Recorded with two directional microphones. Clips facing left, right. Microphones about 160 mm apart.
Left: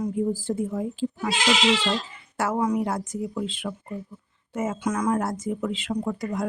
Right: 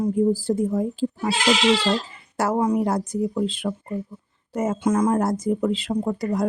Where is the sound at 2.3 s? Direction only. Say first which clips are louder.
Right 3 dB; 35° right (ahead or behind).